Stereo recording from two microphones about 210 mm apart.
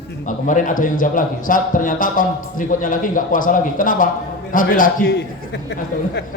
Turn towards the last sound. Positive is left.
turn(degrees=55)  # may be behind; listen again after turning